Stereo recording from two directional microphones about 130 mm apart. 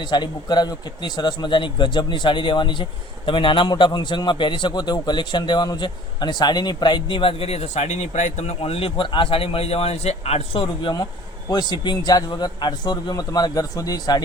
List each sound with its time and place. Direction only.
0.0 s a man's voice: 35° left (ahead or behind); by 10.6 s 50° left (ahead or behind)
10.6 s a man's voice: 35° left (ahead or behind)